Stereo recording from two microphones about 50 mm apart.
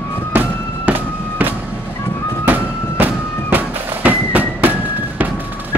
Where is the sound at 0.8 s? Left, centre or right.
Right.